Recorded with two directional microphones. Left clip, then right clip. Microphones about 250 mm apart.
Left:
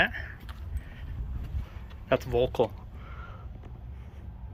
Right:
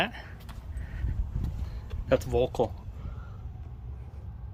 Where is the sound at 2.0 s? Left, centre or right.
Centre.